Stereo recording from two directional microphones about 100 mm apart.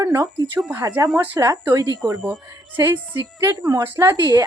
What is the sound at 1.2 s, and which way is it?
Speech, 20° right (ahead or behind).